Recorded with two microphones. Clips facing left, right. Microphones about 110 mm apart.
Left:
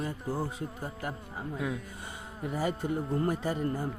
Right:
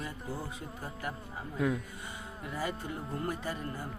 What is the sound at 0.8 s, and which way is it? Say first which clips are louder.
Speech: even; 25° left (ahead or behind).